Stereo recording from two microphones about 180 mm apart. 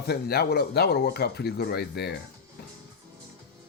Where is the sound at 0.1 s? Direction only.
60° left (ahead or behind).